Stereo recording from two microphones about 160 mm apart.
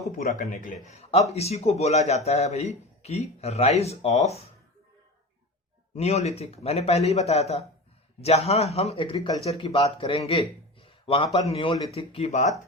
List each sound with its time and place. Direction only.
0.2 s a man's voice: 45° left (ahead or behind)
6.0 s a man's voice: 40° left (ahead or behind)
9.1 s speech: 20° left (ahead or behind)
9.4 s a man's voice: 35° left (ahead or behind)